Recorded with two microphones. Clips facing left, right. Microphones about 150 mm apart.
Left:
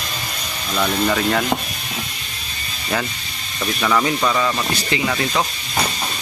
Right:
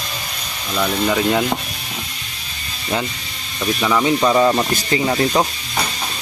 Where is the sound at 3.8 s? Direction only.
10° right (ahead or behind).